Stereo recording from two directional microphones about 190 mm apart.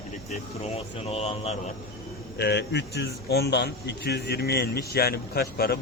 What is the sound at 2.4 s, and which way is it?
Speech, 60° left (ahead or behind).